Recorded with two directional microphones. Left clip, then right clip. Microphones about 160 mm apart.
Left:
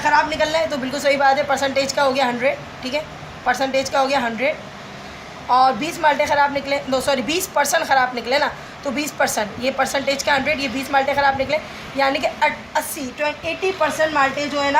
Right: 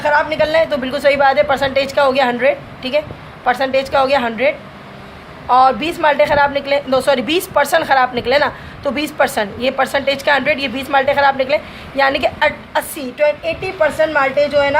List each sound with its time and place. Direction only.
0.0 s a woman's voice: 65° right (ahead or behind)